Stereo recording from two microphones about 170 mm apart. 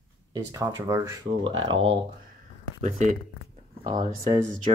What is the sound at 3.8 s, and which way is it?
Speech, 25° right (ahead or behind).